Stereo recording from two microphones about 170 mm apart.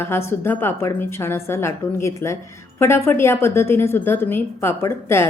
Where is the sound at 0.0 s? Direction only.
15° left (ahead or behind).